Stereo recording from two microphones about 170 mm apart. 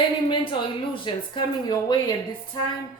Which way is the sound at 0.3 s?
30° left (ahead or behind).